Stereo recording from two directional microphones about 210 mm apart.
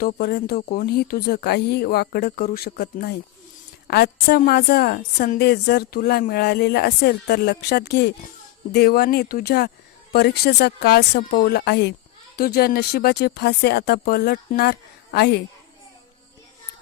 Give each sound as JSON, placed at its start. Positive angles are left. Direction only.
{"t": 0.0, "sound": "a woman's voice", "side_deg": 45}